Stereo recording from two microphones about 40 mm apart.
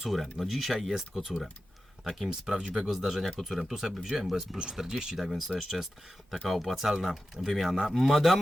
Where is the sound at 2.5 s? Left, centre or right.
Centre.